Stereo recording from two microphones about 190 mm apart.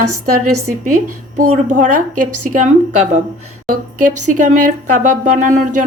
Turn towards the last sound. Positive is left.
turn(degrees=-45)  # may be behind; listen again after turning